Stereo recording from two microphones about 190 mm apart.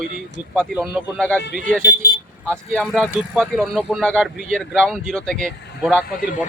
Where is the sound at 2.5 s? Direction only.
5° left (ahead or behind).